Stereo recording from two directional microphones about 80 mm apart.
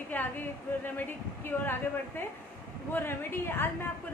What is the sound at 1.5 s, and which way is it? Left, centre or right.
A woman's voice, left.